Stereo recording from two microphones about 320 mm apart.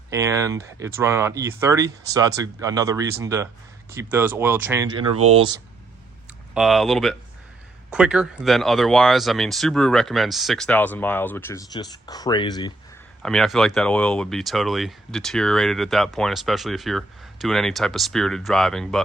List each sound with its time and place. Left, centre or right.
0.1 s speech: centre
5.1 s speech: right
6.5 s speech: centre
13.2 s speech: centre